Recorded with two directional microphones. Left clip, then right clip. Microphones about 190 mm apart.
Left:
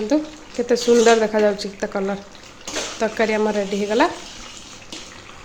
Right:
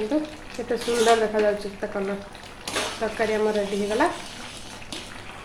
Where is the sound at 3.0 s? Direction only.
60° left (ahead or behind).